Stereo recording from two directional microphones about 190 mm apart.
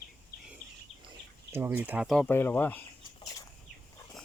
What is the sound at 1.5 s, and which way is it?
Speech, 10° right (ahead or behind).